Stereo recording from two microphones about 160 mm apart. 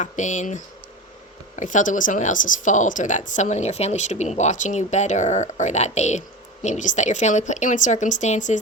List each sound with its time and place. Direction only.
0.0 s speech: 50° left (ahead or behind)